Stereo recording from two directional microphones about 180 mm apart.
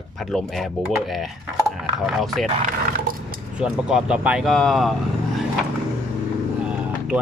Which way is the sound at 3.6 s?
5° right (ahead or behind).